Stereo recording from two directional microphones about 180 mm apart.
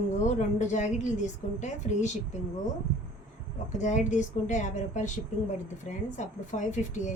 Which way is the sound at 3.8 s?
40° left (ahead or behind).